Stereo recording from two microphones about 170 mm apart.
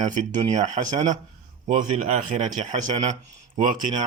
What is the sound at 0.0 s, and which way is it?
Speech, 45° right (ahead or behind).